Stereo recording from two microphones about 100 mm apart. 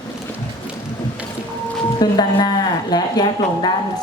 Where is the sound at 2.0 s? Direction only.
45° left (ahead or behind).